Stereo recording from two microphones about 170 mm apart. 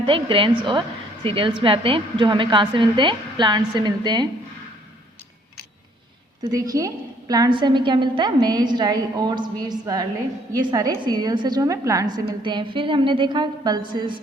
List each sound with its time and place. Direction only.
0.0 s a woman's voice: 30° right (ahead or behind)
6.5 s a woman's voice: 20° right (ahead or behind)